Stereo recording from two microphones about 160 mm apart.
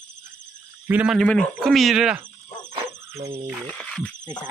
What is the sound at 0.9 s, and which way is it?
Speech, 5° right (ahead or behind).